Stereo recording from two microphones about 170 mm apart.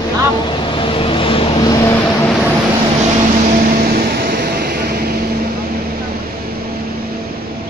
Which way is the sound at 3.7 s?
60° right (ahead or behind).